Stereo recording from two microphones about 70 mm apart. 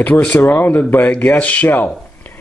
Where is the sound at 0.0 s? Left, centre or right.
Centre.